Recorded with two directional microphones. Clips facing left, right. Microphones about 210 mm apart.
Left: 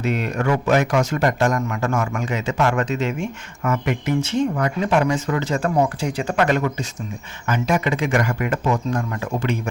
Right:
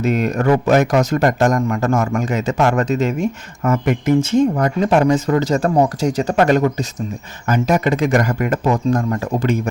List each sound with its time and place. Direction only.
0.0 s speech: 45° right (ahead or behind)